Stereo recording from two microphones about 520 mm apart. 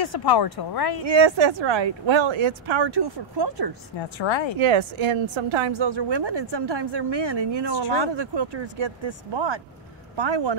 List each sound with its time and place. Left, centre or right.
0.0 s speech: left
1.0 s a woman's voice: right
4.2 s speech: left
4.6 s a woman's voice: right